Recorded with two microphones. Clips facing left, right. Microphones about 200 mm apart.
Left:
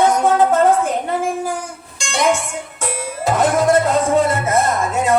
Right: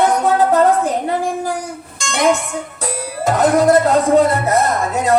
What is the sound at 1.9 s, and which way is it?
Music, 40° right (ahead or behind).